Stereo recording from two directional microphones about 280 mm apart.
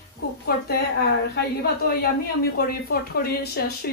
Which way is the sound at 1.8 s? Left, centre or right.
Left.